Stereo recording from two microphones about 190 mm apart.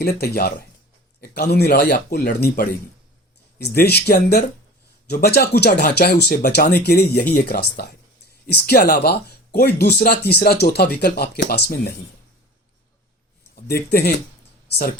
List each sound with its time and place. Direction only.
0.0 s speech: 55° left (ahead or behind)
13.6 s speech: 55° left (ahead or behind)